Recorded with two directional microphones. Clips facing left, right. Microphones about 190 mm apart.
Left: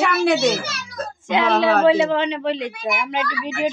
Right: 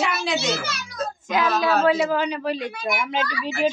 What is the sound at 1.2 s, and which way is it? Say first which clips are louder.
Speech: left 4 dB; 25° left (ahead or behind).